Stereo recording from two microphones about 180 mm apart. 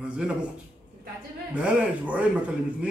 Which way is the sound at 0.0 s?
5° right (ahead or behind).